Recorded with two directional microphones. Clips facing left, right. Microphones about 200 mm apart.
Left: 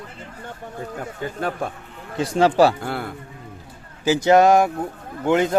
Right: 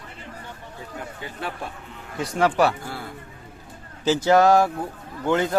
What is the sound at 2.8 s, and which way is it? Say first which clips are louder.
Speech: left 7 dB; 65° left (ahead or behind).